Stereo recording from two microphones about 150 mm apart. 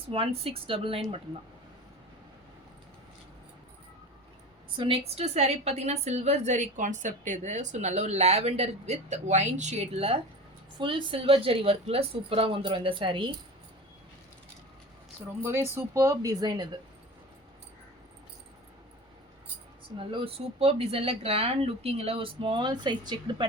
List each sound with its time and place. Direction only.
0.1 s speech: 40° right (ahead or behind)
4.8 s a woman's voice: 40° right (ahead or behind)
15.4 s speech: 15° right (ahead or behind)
20.0 s speech: 35° right (ahead or behind)